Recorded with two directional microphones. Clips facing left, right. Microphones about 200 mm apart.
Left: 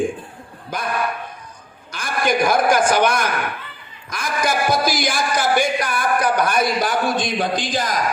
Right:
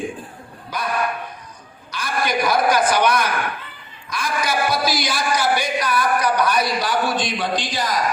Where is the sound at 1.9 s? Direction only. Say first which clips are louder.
Left 2 dB; 50° left (ahead or behind).